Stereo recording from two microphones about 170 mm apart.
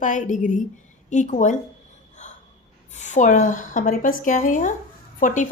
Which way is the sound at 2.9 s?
45° left (ahead or behind).